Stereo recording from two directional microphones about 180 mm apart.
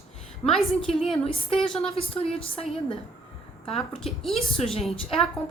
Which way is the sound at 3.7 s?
Centre (ahead or behind).